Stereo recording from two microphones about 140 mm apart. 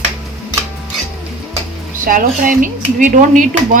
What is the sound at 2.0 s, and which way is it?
Speech, 75° right (ahead or behind).